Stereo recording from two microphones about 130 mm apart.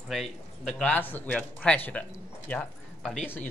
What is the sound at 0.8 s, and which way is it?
Speech, 15° left (ahead or behind).